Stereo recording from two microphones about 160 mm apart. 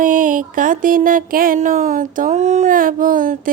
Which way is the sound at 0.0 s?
55° right (ahead or behind).